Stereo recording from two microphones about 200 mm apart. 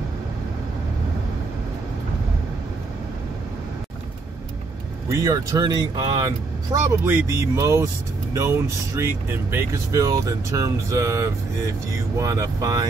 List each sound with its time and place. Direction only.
5.2 s speech: 20° right (ahead or behind)